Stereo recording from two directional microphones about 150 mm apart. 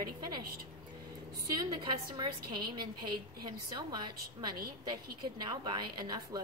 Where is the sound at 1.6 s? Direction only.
30° right (ahead or behind).